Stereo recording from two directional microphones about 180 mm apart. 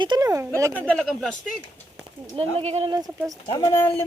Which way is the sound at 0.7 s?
5° left (ahead or behind).